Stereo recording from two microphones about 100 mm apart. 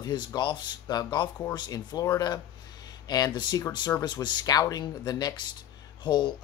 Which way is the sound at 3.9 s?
35° left (ahead or behind).